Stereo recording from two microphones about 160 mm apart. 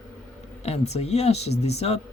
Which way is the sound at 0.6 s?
40° left (ahead or behind).